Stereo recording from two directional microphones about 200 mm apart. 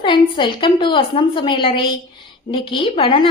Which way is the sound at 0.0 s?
25° left (ahead or behind).